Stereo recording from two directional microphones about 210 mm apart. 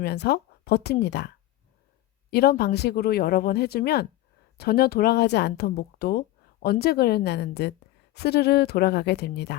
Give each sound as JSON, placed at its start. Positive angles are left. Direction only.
{"t": 0.0, "sound": "speech", "side_deg": 50}
{"t": 2.3, "sound": "speech", "side_deg": 50}